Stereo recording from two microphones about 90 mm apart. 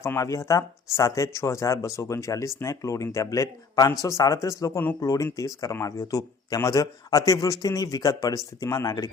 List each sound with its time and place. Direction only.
0.0 s speech: 35° left (ahead or behind)